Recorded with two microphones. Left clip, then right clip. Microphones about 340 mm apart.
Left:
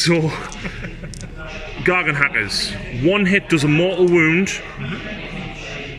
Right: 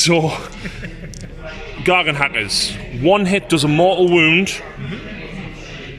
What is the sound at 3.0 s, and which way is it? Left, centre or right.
Speech, right.